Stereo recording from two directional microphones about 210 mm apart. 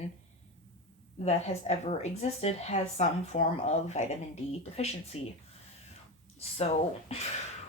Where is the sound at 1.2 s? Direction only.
30° left (ahead or behind).